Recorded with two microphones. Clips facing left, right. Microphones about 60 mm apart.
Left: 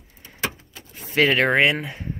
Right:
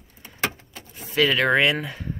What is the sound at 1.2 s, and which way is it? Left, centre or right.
Speech, left.